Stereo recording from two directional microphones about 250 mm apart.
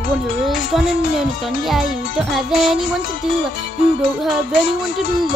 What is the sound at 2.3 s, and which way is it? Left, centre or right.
Speech, centre.